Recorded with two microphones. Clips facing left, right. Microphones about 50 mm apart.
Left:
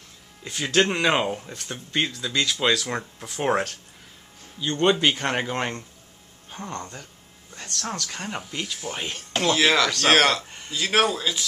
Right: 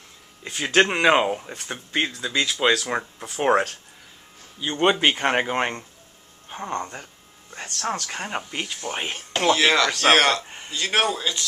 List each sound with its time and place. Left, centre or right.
0.4 s speech: centre
9.5 s speech: centre
10.4 s a man's voice: centre
10.7 s speech: centre